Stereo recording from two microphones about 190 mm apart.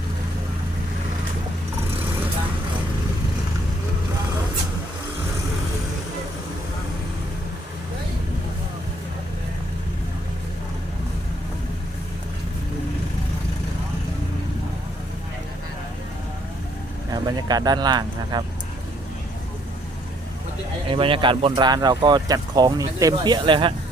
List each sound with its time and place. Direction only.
17.1 s speech: 20° right (ahead or behind)
20.9 s speech: 25° right (ahead or behind)